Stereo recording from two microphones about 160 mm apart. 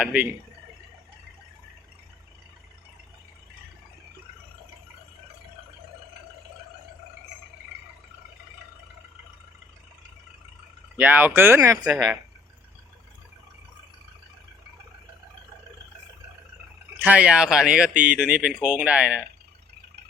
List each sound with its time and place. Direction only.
0.0 s speech: 10° right (ahead or behind)
10.9 s speech: 10° right (ahead or behind)
17.0 s speech: 10° right (ahead or behind)